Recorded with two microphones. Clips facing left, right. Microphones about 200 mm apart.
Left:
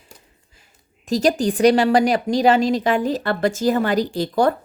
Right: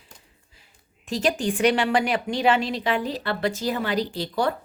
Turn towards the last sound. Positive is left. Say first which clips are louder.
# left 6 dB
turn(degrees=45)  # may be behind; listen again after turning